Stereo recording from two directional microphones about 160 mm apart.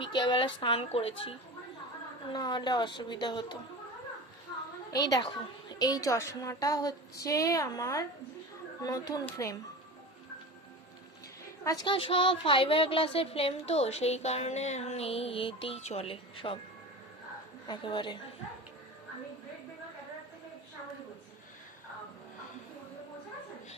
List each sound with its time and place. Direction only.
0.0 s a woman's voice: 30° left (ahead or behind)
5.1 s a woman's voice: 30° left (ahead or behind)
11.6 s a woman's voice: 25° left (ahead or behind)
17.7 s a woman's voice: 30° left (ahead or behind)